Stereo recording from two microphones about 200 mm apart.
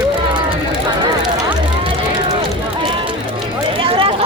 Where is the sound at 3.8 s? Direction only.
25° right (ahead or behind).